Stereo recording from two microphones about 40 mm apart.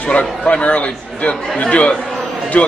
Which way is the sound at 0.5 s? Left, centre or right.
Left.